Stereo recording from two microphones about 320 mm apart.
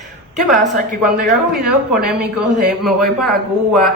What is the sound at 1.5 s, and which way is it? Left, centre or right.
Speech, centre.